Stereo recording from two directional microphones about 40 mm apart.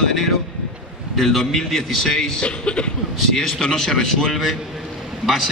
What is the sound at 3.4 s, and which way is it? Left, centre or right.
A man's voice, centre.